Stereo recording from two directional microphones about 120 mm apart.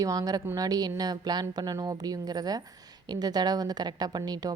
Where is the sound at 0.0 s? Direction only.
30° right (ahead or behind).